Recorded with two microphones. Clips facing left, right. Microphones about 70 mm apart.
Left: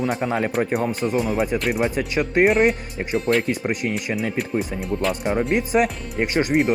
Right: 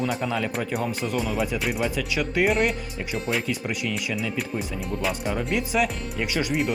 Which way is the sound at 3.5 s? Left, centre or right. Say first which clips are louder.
Left 5 dB; left.